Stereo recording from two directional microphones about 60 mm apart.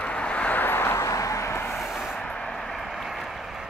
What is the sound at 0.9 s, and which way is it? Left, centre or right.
Vehicle, left.